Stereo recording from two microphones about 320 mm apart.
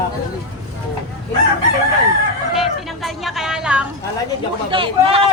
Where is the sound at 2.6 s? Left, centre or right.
Centre.